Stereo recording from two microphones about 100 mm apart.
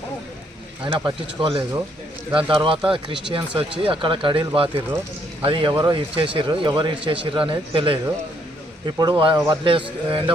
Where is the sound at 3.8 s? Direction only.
60° right (ahead or behind).